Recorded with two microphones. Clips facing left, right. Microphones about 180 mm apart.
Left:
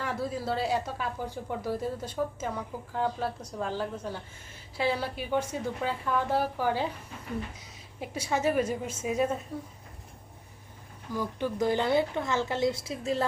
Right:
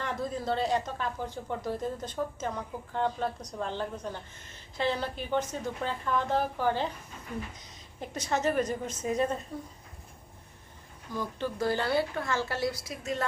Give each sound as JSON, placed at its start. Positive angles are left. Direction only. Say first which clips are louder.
{"t": 0.0, "sound": "speech", "louder": "left 1 dB", "side_deg": 5}
{"t": 7.9, "sound": "speech", "louder": "left 1 dB", "side_deg": 10}
{"t": 11.1, "sound": "a woman's voice", "louder": "left 2 dB", "side_deg": 10}